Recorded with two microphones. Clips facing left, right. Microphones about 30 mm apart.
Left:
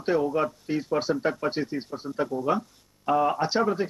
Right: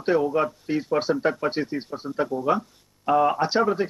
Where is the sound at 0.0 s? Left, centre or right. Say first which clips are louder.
Right 3 dB; centre.